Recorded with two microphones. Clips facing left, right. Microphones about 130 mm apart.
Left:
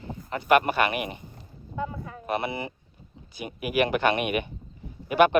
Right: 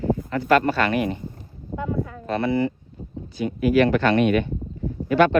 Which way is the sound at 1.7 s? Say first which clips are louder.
Right 1 dB; 40° right (ahead or behind).